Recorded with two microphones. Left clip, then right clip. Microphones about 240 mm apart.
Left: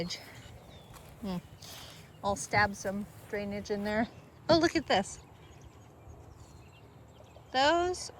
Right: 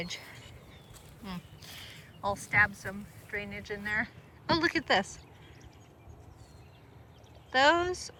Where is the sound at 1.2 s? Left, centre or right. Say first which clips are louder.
Left 3 dB; centre.